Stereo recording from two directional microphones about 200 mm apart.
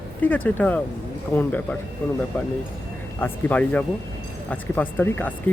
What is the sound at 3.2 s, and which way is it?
Speech, 10° left (ahead or behind).